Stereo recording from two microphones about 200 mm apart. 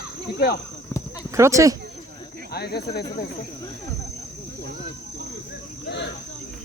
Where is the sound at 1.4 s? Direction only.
15° right (ahead or behind).